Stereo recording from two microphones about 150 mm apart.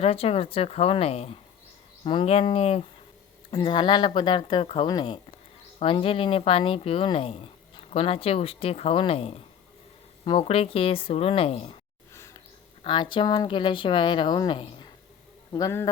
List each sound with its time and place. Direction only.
0.0 s speech: 40° left (ahead or behind)
12.1 s a sound: 20° left (ahead or behind)
12.8 s speech: 30° left (ahead or behind)
15.5 s speech: 20° left (ahead or behind)